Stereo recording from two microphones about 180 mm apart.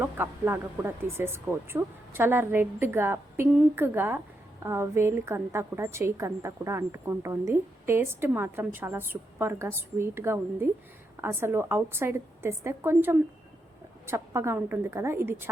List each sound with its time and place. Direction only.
0.0 s a woman's voice: 10° right (ahead or behind)